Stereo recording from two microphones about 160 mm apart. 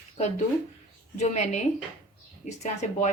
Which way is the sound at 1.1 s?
45° left (ahead or behind).